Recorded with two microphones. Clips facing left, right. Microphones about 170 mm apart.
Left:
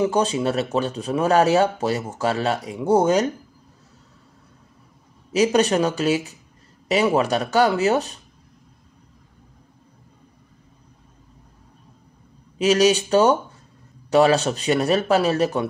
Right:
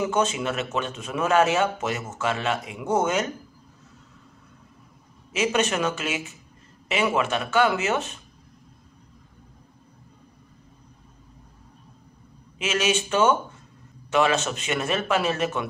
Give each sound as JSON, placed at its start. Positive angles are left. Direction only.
{"t": 0.0, "sound": "speech", "side_deg": 35}
{"t": 5.3, "sound": "speech", "side_deg": 35}
{"t": 12.5, "sound": "speech", "side_deg": 35}